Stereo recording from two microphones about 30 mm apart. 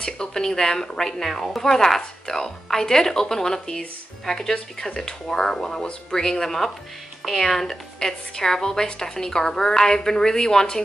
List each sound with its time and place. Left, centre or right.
0.0 s a woman's voice: left
1.2 s a woman's voice: centre